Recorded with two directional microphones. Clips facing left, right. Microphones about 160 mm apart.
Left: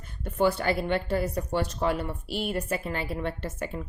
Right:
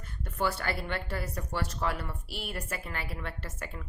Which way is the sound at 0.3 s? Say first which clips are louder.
Left 7 dB; 20° left (ahead or behind).